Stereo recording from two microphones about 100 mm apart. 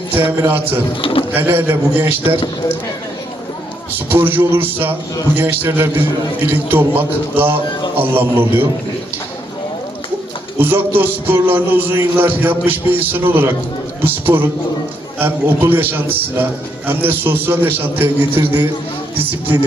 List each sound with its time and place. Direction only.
0.3 s a man's voice: 20° right (ahead or behind)
3.9 s a man's voice: 20° right (ahead or behind)
10.6 s a man's voice: 20° right (ahead or behind)